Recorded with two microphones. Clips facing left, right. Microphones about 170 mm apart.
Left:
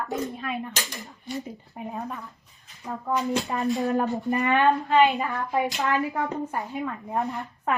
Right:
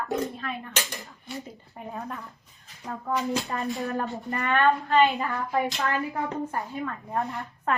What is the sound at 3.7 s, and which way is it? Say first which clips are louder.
Speech: left 5 dB; 20° left (ahead or behind).